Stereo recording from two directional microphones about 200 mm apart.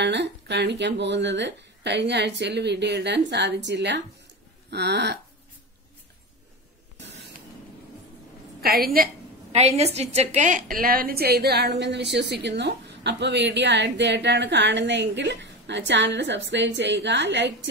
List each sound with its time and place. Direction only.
0.0 s a woman's voice: 60° right (ahead or behind)
8.5 s a woman's voice: 50° right (ahead or behind)
9.5 s a woman's voice: 30° right (ahead or behind); by 17.6 s 60° right (ahead or behind)